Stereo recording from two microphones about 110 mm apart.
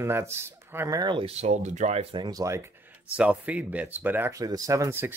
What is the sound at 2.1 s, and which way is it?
Speech, 45° right (ahead or behind).